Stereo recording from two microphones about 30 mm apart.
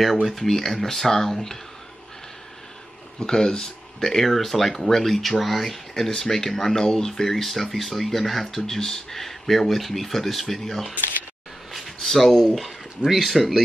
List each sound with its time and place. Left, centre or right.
0.0 s speech: centre
3.2 s speech: left
4.0 s speech: centre
12.0 s speech: centre